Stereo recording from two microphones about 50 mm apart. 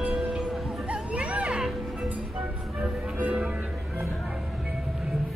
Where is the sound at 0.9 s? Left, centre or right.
Right.